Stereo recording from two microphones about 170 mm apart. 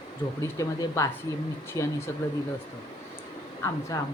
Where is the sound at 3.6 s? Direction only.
15° left (ahead or behind).